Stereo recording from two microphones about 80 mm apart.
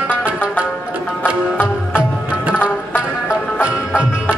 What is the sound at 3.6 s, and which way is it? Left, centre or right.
Music, centre.